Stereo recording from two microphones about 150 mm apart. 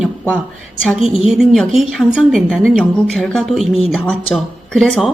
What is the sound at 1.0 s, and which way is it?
A woman's voice, centre (ahead or behind).